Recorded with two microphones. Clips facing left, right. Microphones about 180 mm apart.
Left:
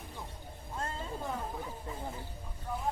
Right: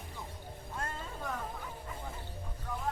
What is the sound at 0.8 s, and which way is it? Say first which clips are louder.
Music: left 3 dB; 25° left (ahead or behind).